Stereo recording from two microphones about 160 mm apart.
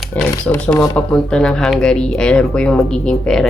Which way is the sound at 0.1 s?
10° left (ahead or behind).